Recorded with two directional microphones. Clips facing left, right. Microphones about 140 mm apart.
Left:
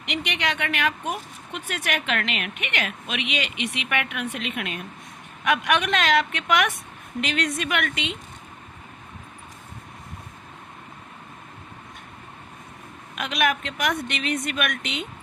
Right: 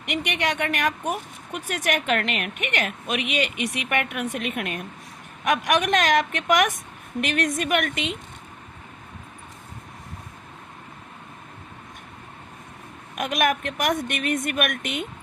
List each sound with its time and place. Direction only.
0.0 s a woman's voice: 45° right (ahead or behind)
13.1 s a woman's voice: 45° right (ahead or behind)